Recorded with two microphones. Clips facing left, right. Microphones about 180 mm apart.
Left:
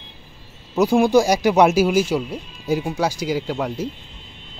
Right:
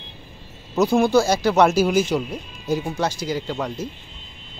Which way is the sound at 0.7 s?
10° left (ahead or behind).